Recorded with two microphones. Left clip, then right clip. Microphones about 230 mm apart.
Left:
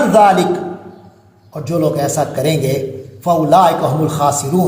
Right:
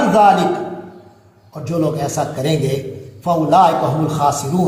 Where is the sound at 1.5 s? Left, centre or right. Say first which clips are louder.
Left 3 dB; left.